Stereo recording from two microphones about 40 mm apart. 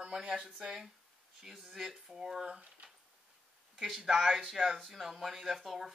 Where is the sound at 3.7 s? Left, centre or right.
Centre.